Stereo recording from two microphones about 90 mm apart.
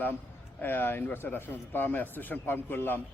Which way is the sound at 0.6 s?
20° left (ahead or behind).